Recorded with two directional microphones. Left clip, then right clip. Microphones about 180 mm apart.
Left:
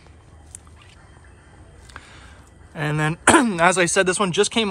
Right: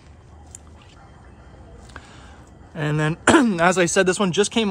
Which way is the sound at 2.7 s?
15° right (ahead or behind).